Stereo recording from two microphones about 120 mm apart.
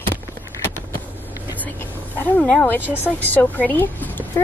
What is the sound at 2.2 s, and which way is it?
A woman's voice, 15° left (ahead or behind).